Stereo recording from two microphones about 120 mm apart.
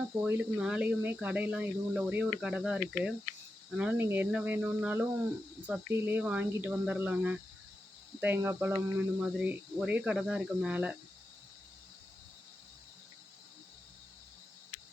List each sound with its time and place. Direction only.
0.3 s speech: 15° right (ahead or behind)